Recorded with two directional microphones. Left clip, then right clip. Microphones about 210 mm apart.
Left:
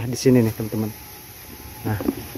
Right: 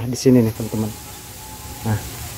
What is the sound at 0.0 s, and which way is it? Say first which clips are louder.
Speech: right 2 dB; 10° left (ahead or behind).